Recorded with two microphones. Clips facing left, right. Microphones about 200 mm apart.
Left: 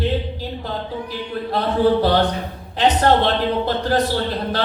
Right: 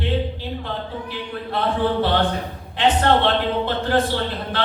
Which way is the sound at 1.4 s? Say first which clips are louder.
Left 4 dB; 40° left (ahead or behind).